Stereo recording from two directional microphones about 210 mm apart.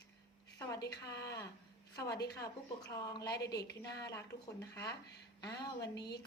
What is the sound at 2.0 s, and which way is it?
A woman's voice, 20° left (ahead or behind).